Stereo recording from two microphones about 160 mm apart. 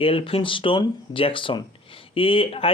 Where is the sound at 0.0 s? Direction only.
35° left (ahead or behind).